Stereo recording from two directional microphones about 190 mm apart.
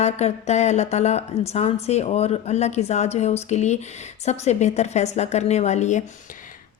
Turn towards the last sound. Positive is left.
turn(degrees=40)  # may be behind; listen again after turning